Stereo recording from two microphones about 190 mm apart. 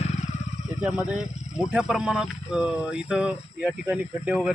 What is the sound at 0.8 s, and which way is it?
Speech, 5° right (ahead or behind).